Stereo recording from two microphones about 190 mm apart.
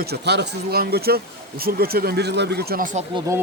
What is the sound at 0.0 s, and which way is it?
Speech, 60° right (ahead or behind).